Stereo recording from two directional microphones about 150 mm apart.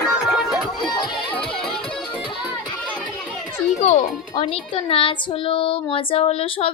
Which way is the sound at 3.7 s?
50° left (ahead or behind).